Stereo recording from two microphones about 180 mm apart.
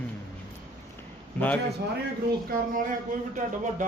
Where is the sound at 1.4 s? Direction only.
10° left (ahead or behind).